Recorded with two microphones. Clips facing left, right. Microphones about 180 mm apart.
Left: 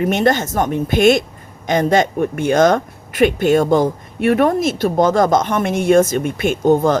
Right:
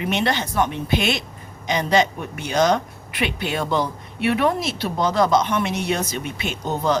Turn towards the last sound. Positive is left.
turn(degrees=50)  # may be behind; listen again after turning